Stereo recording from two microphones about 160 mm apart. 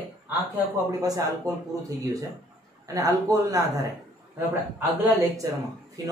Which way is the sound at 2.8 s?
20° right (ahead or behind).